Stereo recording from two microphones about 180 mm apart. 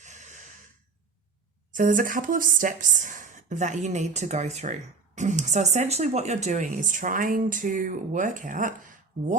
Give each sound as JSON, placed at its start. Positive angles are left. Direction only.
{"t": 0.0, "sound": "gasp", "side_deg": -40}
{"t": 1.7, "sound": "speech", "side_deg": -50}